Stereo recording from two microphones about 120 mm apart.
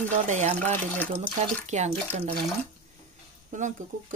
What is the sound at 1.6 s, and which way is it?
Speech, 75° right (ahead or behind).